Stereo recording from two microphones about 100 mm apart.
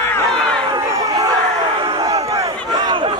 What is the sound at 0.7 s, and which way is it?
Crowd, 35° right (ahead or behind).